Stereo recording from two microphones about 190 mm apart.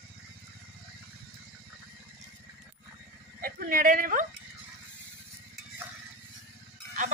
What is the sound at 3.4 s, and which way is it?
Speech, 50° right (ahead or behind).